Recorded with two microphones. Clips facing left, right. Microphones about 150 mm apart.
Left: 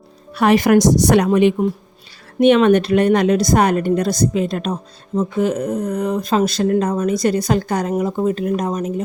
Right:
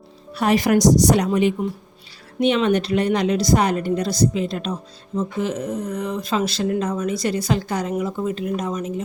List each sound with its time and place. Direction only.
0.3 s a woman's voice: 60° left (ahead or behind); by 9.0 s 45° left (ahead or behind)